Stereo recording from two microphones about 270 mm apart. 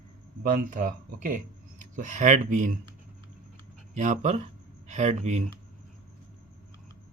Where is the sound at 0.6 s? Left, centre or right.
Right.